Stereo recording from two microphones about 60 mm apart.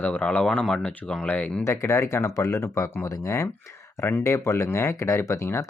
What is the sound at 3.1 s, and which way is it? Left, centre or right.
Speech, left.